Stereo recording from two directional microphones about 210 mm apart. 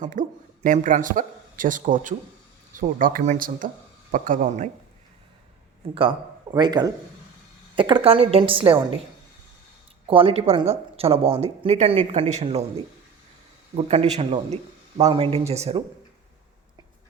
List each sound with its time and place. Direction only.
0.0 s speech: 40° right (ahead or behind)
5.9 s speech: 25° right (ahead or behind)
10.1 s speech: 25° right (ahead or behind)
13.7 s speech: 30° right (ahead or behind)